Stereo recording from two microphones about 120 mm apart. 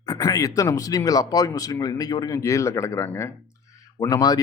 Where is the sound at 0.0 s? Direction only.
30° left (ahead or behind).